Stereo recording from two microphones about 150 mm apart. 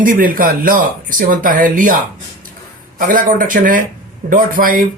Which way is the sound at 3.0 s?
65° right (ahead or behind).